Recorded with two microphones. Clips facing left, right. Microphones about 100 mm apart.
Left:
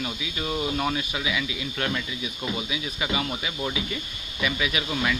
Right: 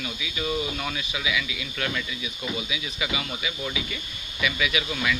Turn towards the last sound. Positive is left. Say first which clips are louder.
# even
turn(degrees=35)  # may be behind; listen again after turning